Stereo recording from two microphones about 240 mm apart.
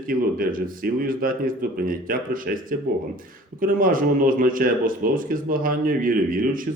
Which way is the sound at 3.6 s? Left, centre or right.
Right.